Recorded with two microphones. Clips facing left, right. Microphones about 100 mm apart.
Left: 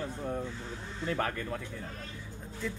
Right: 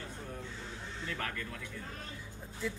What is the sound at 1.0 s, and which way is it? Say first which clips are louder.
Speech: left 8 dB; 35° left (ahead or behind).